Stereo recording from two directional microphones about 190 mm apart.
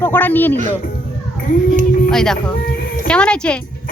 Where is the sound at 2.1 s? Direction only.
5° left (ahead or behind).